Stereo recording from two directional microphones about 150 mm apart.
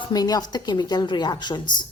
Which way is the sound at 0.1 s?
25° left (ahead or behind).